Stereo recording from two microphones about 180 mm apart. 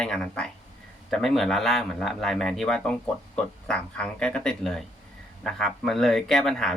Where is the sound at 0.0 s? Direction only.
5° left (ahead or behind).